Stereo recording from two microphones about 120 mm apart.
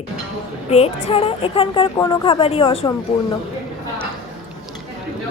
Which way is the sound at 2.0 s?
40° left (ahead or behind).